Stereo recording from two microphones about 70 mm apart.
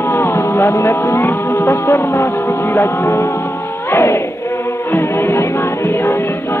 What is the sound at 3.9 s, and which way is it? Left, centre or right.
Speech, left.